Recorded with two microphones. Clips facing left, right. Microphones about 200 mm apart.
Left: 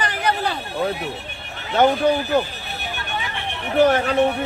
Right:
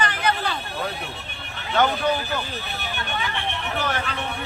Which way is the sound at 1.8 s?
40° left (ahead or behind).